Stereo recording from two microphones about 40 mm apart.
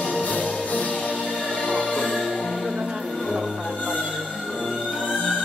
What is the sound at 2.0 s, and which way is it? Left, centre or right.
Music, centre.